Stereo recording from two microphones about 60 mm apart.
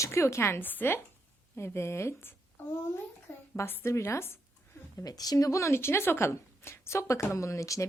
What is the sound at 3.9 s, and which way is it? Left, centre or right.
Speech, left.